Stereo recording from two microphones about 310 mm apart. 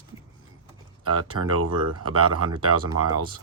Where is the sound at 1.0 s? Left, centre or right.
Right.